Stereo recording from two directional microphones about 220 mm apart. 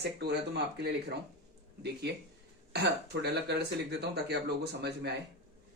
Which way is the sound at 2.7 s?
50° right (ahead or behind).